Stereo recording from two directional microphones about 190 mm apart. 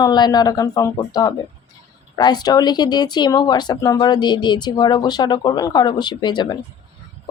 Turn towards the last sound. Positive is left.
turn(degrees=25)  # may be behind; listen again after turning